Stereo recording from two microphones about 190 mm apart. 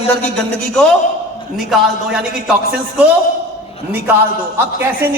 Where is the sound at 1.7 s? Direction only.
5° right (ahead or behind).